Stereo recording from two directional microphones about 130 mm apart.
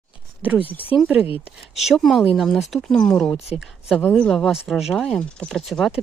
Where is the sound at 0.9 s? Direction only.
10° right (ahead or behind).